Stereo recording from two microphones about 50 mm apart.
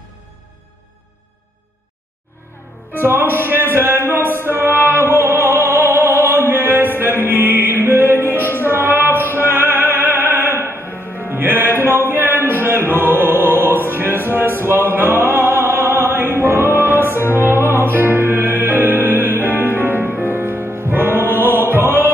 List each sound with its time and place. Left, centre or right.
3.0 s music: right
8.6 s opera: right
11.1 s music: right